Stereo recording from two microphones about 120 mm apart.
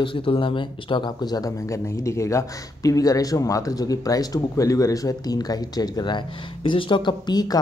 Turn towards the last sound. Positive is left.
turn(degrees=35)  # may be behind; listen again after turning